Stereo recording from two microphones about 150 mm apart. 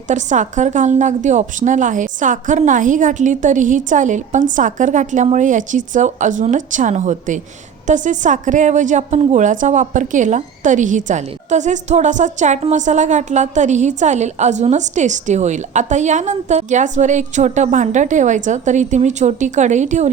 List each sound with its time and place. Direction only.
0.1 s a woman's voice: 55° right (ahead or behind)